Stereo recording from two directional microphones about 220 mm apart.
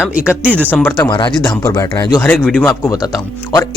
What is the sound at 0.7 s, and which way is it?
Speech, 10° left (ahead or behind).